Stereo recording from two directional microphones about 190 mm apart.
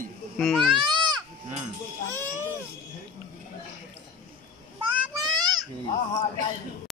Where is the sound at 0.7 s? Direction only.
25° right (ahead or behind).